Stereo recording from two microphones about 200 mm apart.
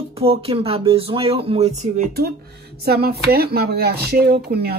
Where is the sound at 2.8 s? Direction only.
50° right (ahead or behind).